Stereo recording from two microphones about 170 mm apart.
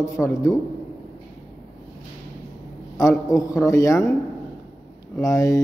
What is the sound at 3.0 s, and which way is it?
A man's voice, 20° left (ahead or behind).